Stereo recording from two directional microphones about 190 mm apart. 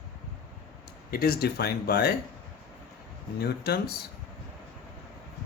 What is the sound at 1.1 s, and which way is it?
Speech, 50° left (ahead or behind).